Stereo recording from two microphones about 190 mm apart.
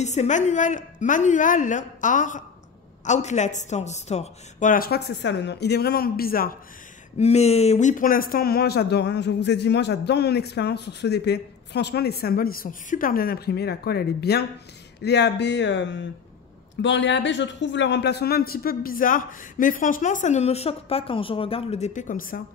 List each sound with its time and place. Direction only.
0.0 s a woman's voice: 35° left (ahead or behind)
7.2 s a man's voice: 35° left (ahead or behind)